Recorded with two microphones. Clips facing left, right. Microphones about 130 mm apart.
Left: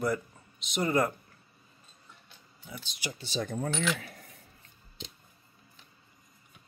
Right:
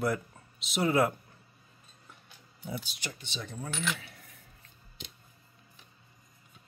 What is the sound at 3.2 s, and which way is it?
Speech, 40° left (ahead or behind).